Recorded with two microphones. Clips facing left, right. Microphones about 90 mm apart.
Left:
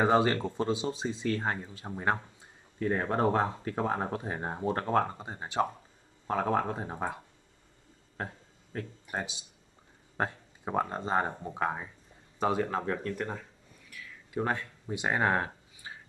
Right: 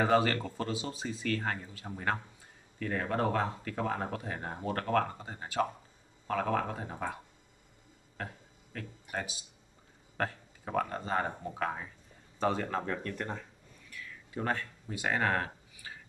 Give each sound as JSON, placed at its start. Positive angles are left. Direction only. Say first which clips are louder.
{"t": 0.0, "sound": "speech", "louder": "left 2 dB", "side_deg": 20}
{"t": 8.7, "sound": "speech", "louder": "left 3 dB", "side_deg": 25}
{"t": 13.8, "sound": "a sound", "louder": "right 1 dB", "side_deg": 10}